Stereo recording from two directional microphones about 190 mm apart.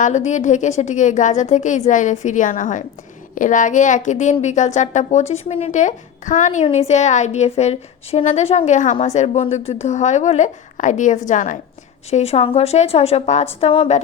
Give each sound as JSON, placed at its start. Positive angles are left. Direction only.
{"t": 0.0, "sound": "a woman's voice", "side_deg": 40}